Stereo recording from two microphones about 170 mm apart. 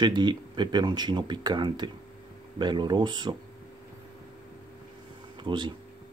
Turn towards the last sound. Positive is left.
turn(degrees=-25)  # may be behind; listen again after turning